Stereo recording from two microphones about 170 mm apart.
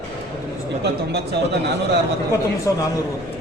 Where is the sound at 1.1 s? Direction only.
80° right.